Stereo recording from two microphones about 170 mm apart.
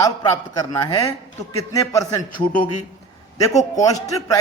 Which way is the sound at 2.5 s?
50° left (ahead or behind).